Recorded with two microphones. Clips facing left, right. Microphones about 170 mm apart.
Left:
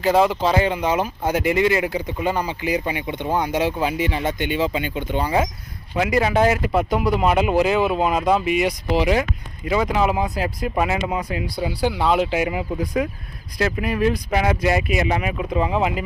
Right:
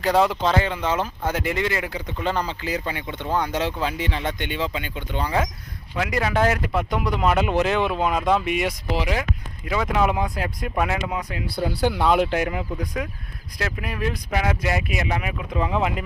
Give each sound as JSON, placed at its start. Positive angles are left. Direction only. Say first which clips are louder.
{"t": 0.0, "sound": "speech", "louder": "left 2 dB", "side_deg": 0}
{"t": 0.5, "sound": "speech", "louder": "left 3 dB", "side_deg": 15}
{"t": 6.5, "sound": "speech", "louder": "left 4 dB", "side_deg": 5}